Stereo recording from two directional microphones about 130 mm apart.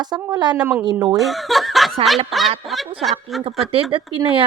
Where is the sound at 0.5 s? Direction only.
10° right (ahead or behind).